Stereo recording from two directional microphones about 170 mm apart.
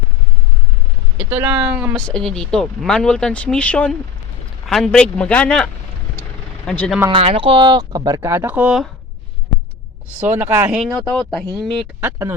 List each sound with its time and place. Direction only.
1.1 s speech: 10° right (ahead or behind)
2.0 s speech: 5° left (ahead or behind)
7.1 s speech: 35° right (ahead or behind); by 8.9 s 5° right (ahead or behind)
10.2 s speech: 10° right (ahead or behind)
11.2 s speech: centre (ahead or behind)
11.9 s speech: 10° right (ahead or behind)